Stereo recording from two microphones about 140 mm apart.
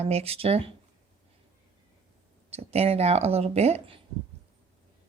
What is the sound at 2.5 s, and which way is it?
Speech, 45° right (ahead or behind).